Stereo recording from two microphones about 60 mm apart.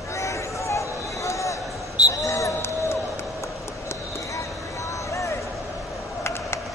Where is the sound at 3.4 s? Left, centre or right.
Left.